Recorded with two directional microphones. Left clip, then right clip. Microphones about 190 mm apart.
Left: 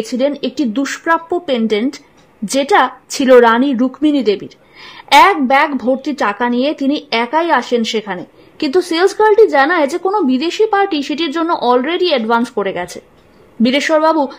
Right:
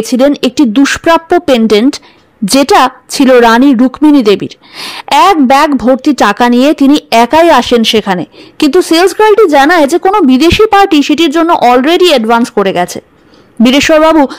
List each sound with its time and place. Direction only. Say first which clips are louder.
0.0 s speech: right 8 dB; 30° right (ahead or behind)